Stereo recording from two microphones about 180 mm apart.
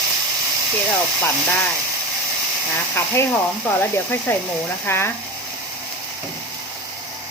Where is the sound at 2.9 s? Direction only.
15° left (ahead or behind).